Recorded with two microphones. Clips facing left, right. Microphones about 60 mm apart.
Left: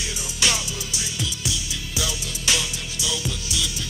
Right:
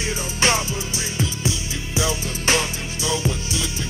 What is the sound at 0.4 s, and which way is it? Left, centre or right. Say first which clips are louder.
Music: right 4 dB; right.